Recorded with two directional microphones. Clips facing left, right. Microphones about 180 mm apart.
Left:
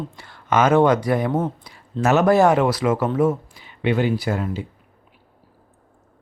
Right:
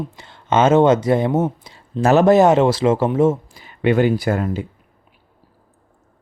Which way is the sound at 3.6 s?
50° right (ahead or behind).